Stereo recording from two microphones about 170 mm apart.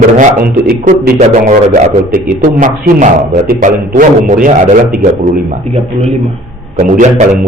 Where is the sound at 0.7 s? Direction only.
55° right (ahead or behind).